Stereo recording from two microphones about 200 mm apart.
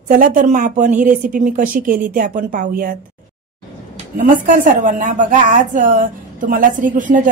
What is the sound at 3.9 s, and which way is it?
A woman's voice, 40° right (ahead or behind).